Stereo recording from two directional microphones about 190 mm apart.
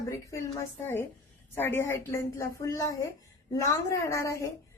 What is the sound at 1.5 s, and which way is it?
A woman's voice, 10° left (ahead or behind).